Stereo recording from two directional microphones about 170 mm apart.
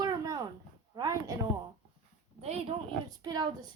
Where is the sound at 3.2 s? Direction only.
25° right (ahead or behind).